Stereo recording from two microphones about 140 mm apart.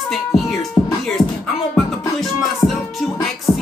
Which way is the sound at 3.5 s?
25° left (ahead or behind).